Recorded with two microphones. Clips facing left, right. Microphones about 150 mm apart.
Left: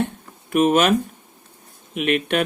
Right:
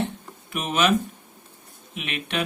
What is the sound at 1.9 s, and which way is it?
Speech, 50° left (ahead or behind).